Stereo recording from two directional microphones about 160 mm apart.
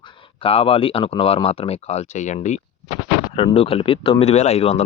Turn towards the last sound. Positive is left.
turn(degrees=40)  # may be behind; listen again after turning